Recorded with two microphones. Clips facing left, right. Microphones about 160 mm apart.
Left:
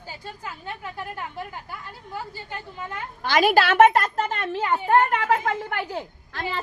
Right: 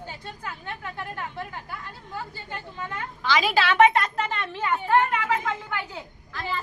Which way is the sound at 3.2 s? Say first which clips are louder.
Left 4 dB; 50° left (ahead or behind).